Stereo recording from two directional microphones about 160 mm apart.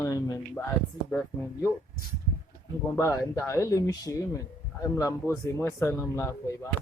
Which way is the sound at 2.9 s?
20° left (ahead or behind).